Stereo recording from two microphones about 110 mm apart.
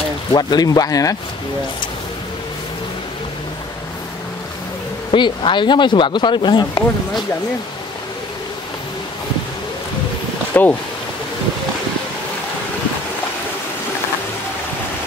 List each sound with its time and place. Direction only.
0.3 s speech: 40° left (ahead or behind)
5.1 s speech: 45° left (ahead or behind)
10.5 s speech: 15° left (ahead or behind)